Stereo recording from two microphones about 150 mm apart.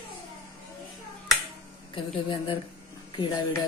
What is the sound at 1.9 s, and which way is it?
A woman's voice, 35° left (ahead or behind).